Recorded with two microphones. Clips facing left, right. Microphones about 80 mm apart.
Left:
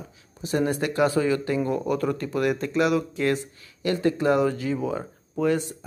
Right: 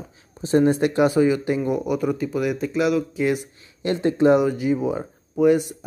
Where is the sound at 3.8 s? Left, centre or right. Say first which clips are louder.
Right 4 dB; right.